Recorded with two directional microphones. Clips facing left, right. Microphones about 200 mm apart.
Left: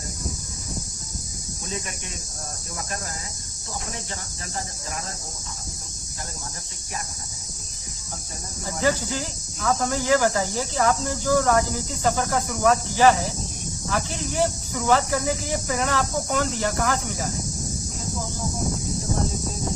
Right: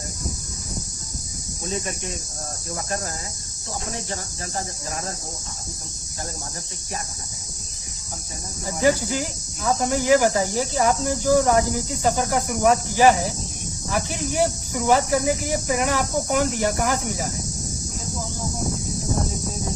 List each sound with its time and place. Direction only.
8.6 s speech: 15° right (ahead or behind)